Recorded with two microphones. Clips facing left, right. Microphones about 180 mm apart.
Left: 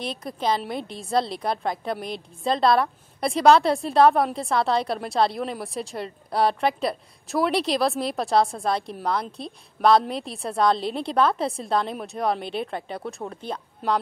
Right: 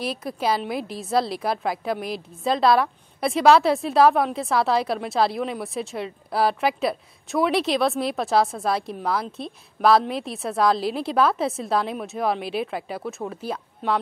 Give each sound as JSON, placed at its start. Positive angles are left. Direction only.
{"t": 0.0, "sound": "a woman's voice", "side_deg": -5}